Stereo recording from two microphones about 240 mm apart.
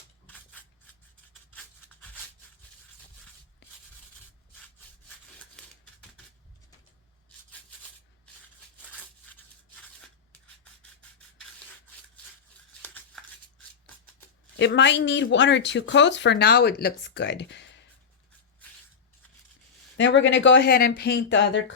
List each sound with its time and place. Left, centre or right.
0.3 s scissors: centre
14.5 s speech: left
20.0 s speech: left